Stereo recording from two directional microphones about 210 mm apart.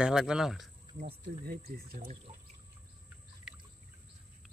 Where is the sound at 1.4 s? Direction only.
45° right (ahead or behind).